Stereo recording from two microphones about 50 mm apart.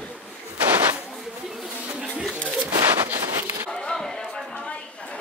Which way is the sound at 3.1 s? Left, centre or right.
Right.